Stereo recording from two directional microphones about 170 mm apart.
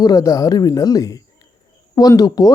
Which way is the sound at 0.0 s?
20° left (ahead or behind).